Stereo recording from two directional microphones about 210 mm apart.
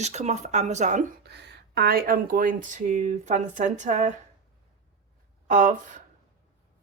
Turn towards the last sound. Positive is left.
turn(degrees=-35)  # may be behind; listen again after turning